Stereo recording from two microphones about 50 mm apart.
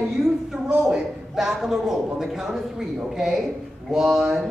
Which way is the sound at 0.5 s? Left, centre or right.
Centre.